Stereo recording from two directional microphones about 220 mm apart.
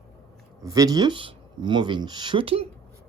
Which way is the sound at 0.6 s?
15° right (ahead or behind).